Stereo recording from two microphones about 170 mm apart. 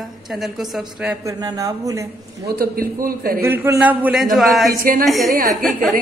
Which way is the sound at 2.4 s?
60° right (ahead or behind).